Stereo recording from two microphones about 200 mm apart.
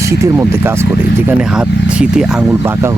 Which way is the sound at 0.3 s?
10° right (ahead or behind).